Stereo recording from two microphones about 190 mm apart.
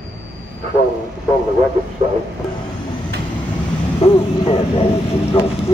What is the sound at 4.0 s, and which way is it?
Speech, 30° left (ahead or behind).